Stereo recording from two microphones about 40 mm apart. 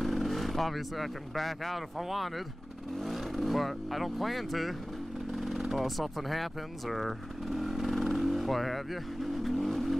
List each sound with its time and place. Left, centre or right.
0.0 s speech: centre